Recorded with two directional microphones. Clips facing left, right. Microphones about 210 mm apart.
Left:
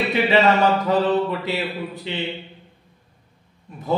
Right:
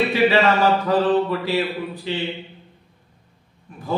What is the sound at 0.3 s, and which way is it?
Speech, 20° left (ahead or behind).